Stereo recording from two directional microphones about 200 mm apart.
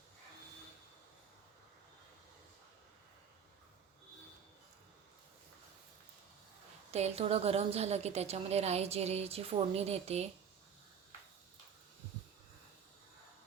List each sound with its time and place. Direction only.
6.9 s a woman's voice: 30° right (ahead or behind)